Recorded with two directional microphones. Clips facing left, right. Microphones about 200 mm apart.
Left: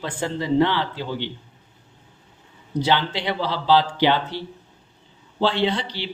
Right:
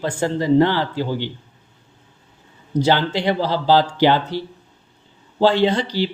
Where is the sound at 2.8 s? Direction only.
45° right (ahead or behind).